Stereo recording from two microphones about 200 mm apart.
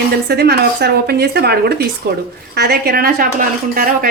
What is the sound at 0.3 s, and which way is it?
A woman's voice, 55° right (ahead or behind).